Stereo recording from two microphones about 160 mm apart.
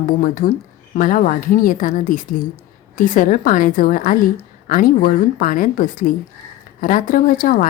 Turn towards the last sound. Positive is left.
turn(degrees=55)  # may be behind; listen again after turning